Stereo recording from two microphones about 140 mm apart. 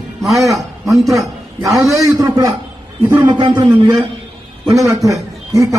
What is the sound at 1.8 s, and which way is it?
A man's voice, 25° right (ahead or behind).